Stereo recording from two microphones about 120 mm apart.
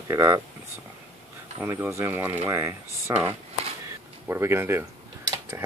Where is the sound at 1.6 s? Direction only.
20° right (ahead or behind).